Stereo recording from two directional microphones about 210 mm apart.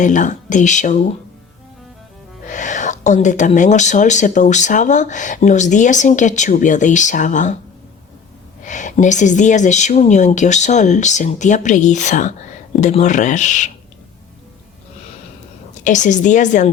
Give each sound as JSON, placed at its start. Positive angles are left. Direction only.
{"t": 0.0, "sound": "speech", "side_deg": 35}
{"t": 2.5, "sound": "speech", "side_deg": 35}
{"t": 8.6, "sound": "speech", "side_deg": 35}
{"t": 15.8, "sound": "speech", "side_deg": 35}